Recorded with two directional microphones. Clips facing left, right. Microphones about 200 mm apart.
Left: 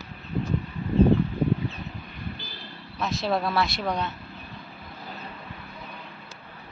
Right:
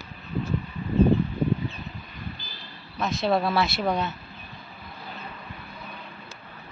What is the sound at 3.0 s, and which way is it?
Speech, centre (ahead or behind).